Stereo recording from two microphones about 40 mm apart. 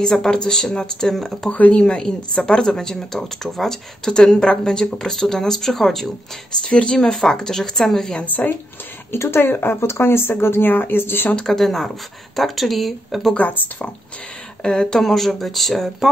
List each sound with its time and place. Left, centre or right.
0.0 s a woman's voice: centre
1.5 s a woman's voice: left; by 6.0 s centre
6.6 s a woman's voice: left
8.3 s speech: left
9.1 s speech: left
10.7 s speech: left
11.4 s a woman's voice: centre
13.4 s speech: left
14.6 s speech: centre
15.0 s speech: centre